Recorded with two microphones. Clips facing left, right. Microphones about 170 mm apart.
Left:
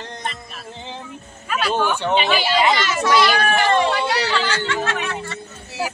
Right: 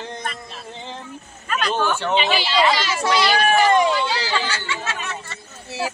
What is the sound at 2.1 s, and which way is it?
Speech, 50° left (ahead or behind).